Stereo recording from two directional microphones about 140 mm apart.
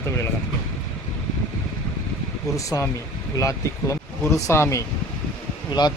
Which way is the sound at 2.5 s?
20° left (ahead or behind).